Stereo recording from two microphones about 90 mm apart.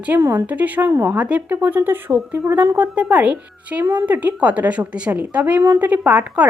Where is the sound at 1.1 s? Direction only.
15° right (ahead or behind).